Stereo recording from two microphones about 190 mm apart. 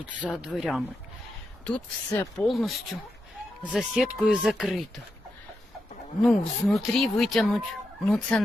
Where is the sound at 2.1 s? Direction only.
15° left (ahead or behind).